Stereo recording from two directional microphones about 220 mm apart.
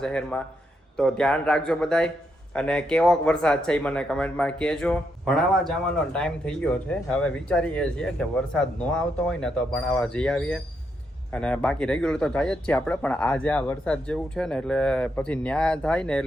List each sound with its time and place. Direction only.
0.0 s speech: 5° left (ahead or behind)